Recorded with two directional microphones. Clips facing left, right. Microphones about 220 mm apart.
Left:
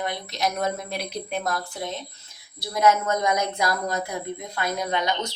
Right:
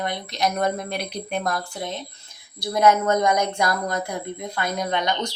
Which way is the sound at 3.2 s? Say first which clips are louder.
Right 3 dB; 5° left (ahead or behind).